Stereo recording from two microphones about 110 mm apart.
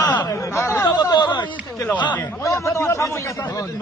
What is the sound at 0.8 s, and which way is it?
Speech, 40° left (ahead or behind).